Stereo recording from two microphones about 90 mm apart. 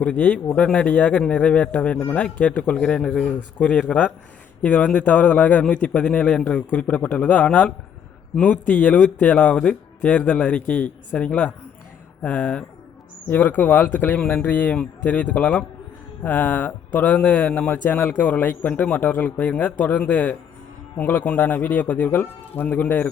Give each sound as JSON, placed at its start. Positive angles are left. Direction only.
{"t": 0.0, "sound": "a man's voice", "side_deg": 15}